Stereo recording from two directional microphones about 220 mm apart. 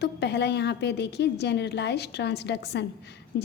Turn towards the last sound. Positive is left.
turn(degrees=45)  # may be behind; listen again after turning